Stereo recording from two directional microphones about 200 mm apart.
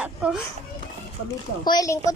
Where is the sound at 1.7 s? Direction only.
15° left (ahead or behind).